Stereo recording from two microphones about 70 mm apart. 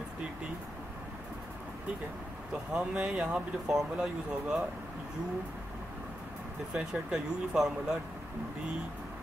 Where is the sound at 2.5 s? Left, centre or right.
Centre.